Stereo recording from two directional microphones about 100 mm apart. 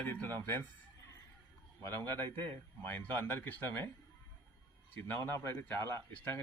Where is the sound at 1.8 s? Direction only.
25° left (ahead or behind).